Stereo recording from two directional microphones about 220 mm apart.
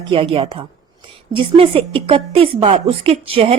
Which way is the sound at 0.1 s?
25° right (ahead or behind).